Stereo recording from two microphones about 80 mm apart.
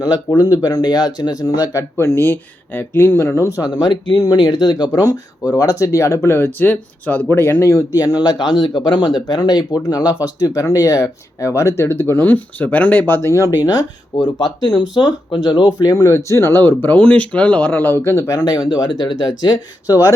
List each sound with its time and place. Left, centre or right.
0.3 s speech: left
1.7 s speech: left
3.6 s speech: left
4.9 s speech: left
7.9 s speech: left
9.2 s speech: left
10.4 s speech: left
13.6 s speech: left
15.0 s speech: left
15.9 s speech: left
16.4 s speech: left
18.3 s speech: left